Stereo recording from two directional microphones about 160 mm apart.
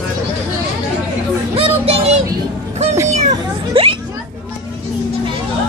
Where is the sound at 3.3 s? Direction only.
35° right (ahead or behind).